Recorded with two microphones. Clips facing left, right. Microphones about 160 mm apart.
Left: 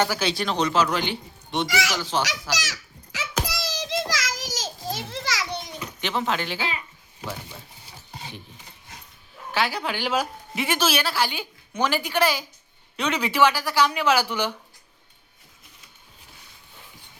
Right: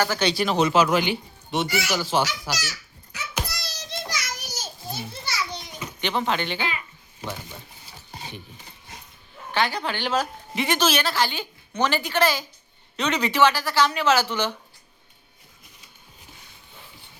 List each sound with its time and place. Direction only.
0.1 s a man's voice: 5° left (ahead or behind)
1.6 s speech: 90° left
2.0 s a man's voice: 10° right (ahead or behind)
2.6 s a sound: 90° left
6.0 s speech: centre (ahead or behind)
9.5 s speech: 5° left (ahead or behind)